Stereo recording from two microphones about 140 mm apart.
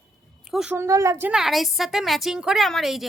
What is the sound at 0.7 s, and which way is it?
Speech, 20° right (ahead or behind).